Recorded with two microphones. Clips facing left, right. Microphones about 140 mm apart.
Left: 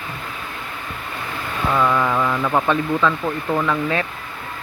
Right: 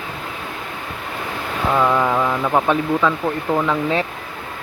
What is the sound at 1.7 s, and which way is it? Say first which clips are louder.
Speech: right 2 dB; 15° right (ahead or behind).